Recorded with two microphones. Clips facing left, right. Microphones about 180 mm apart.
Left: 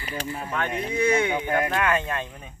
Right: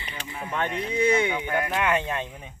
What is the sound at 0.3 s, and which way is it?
Speech, 20° right (ahead or behind).